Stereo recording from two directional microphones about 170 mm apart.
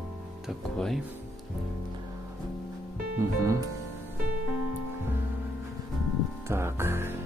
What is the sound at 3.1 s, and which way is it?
Speech, 15° right (ahead or behind).